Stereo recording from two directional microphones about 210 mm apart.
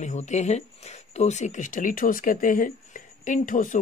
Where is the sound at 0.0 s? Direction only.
35° left (ahead or behind).